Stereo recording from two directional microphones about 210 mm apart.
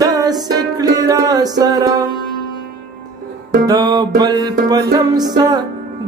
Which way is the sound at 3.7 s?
20° right (ahead or behind).